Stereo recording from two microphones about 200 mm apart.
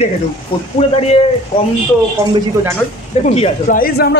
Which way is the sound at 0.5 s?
25° left (ahead or behind).